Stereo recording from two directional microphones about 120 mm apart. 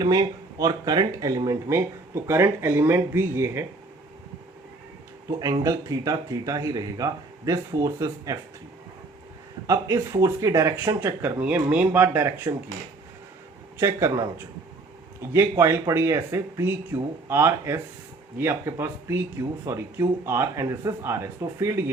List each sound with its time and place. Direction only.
0.0 s speech: 30° right (ahead or behind)
5.6 s speech: 30° right (ahead or behind)
9.6 s speech: 25° right (ahead or behind)
13.7 s speech: 25° right (ahead or behind)